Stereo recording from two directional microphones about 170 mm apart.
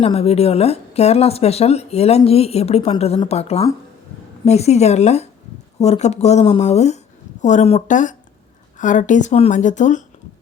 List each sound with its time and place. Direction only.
0.0 s a woman's voice: 35° left (ahead or behind)